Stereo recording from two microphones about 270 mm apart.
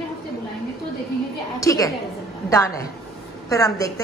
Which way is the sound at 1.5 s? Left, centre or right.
Centre.